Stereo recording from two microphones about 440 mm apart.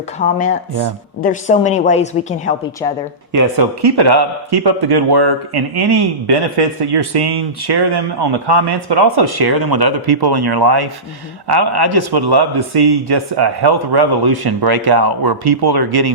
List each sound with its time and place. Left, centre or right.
0.2 s speech: centre
3.3 s speech: right
3.8 s a man's voice: right